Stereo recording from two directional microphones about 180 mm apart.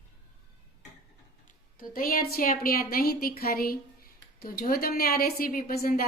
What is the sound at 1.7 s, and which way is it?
A woman's voice, 55° left (ahead or behind).